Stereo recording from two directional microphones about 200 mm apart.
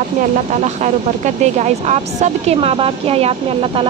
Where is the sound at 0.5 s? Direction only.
35° right (ahead or behind).